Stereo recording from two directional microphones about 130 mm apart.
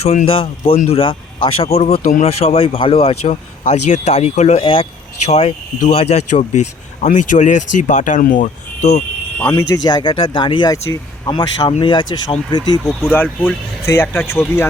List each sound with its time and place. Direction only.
0.0 s speech: 55° left (ahead or behind)
3.2 s speech: 70° left (ahead or behind)
4.6 s speech: 40° left (ahead or behind)
5.2 s speech: 55° left (ahead or behind)
7.0 s speech: 70° left (ahead or behind); by 8.9 s 90° left
9.4 s speech: 20° left (ahead or behind)
9.8 s speech: 35° left (ahead or behind)
13.0 s speech: 15° left (ahead or behind)